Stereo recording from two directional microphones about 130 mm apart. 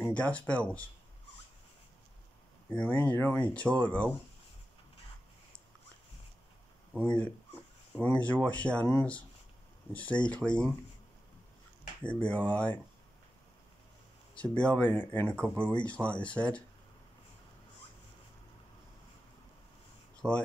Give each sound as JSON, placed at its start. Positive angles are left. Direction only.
{"t": 0.0, "sound": "speech", "side_deg": 10}
{"t": 2.7, "sound": "speech", "side_deg": 10}
{"t": 6.9, "sound": "speech", "side_deg": 15}
{"t": 10.2, "sound": "speech", "side_deg": 10}
{"t": 12.0, "sound": "speech", "side_deg": 10}
{"t": 14.3, "sound": "speech", "side_deg": 10}
{"t": 20.2, "sound": "a sound", "side_deg": 10}